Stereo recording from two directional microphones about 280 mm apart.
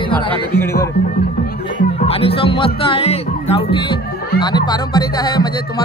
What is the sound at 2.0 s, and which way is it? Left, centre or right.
Speech, left.